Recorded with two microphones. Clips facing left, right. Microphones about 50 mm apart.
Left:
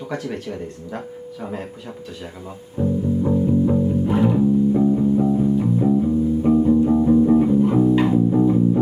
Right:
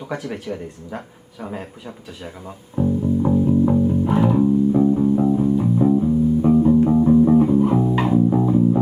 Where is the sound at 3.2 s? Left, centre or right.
Centre.